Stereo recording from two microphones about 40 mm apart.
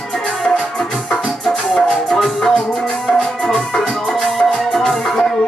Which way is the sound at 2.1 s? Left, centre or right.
Centre.